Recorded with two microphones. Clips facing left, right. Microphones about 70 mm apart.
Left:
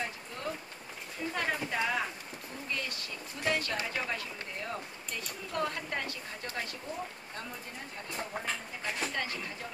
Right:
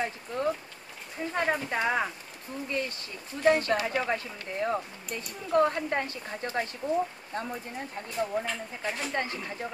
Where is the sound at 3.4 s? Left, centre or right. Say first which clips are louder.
Right 9 dB; right.